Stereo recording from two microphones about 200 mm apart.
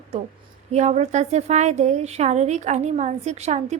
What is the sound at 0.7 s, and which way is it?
A woman's voice, 35° right (ahead or behind).